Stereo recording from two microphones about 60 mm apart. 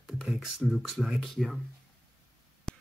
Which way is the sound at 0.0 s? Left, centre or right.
Centre.